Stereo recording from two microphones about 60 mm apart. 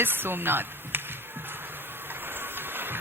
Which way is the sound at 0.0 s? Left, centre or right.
Right.